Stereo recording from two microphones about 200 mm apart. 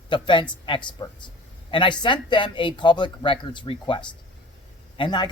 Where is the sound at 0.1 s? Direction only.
25° left (ahead or behind).